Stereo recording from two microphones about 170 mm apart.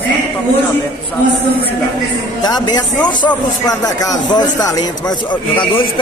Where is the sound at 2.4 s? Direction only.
25° left (ahead or behind).